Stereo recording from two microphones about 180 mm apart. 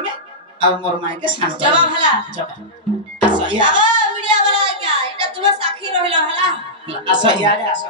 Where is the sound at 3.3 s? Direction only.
25° right (ahead or behind).